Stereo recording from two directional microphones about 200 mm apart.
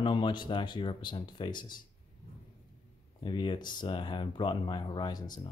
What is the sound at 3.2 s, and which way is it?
Speech, 25° left (ahead or behind).